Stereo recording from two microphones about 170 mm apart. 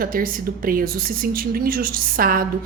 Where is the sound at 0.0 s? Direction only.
55° right (ahead or behind).